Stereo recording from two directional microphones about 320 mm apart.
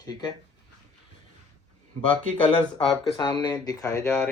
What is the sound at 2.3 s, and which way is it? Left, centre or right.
Speech, centre.